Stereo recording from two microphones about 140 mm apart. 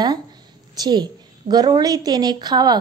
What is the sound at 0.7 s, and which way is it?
A woman's voice, 30° right (ahead or behind).